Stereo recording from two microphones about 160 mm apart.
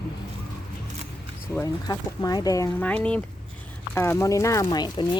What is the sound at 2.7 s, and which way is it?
Speech, 10° left (ahead or behind).